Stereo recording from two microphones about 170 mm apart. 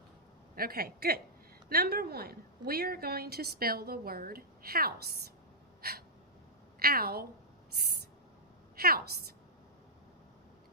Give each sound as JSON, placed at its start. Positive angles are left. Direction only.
{"t": 0.5, "sound": "a woman's voice", "side_deg": -60}
{"t": 6.7, "sound": "a woman's voice", "side_deg": -60}
{"t": 8.7, "sound": "a woman's voice", "side_deg": -65}